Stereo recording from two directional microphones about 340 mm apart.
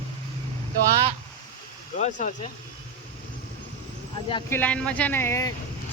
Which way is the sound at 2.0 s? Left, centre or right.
Left.